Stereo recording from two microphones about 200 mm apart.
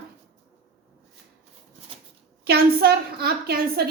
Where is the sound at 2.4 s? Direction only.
50° right (ahead or behind).